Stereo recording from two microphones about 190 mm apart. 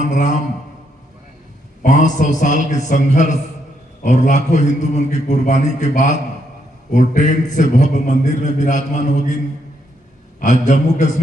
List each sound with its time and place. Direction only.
0.0 s a man's voice: 40° left (ahead or behind)
1.8 s a man's voice: 40° left (ahead or behind)
10.4 s a man's voice: 40° left (ahead or behind)